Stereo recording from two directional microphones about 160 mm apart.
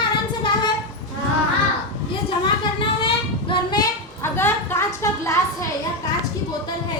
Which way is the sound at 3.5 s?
25° left (ahead or behind).